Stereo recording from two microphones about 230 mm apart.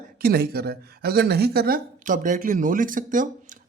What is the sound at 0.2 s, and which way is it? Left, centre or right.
Speech, right.